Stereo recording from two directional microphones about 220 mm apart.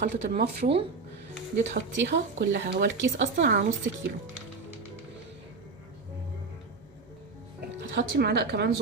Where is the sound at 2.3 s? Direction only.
45° right (ahead or behind); by 3.3 s 60° right (ahead or behind).